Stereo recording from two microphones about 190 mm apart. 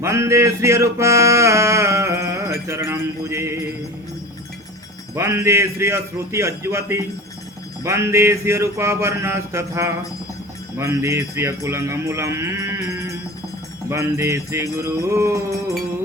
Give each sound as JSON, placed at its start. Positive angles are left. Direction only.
{"t": 0.0, "sound": "male singing", "side_deg": -15}
{"t": 5.1, "sound": "male singing", "side_deg": -15}
{"t": 13.9, "sound": "male singing", "side_deg": -15}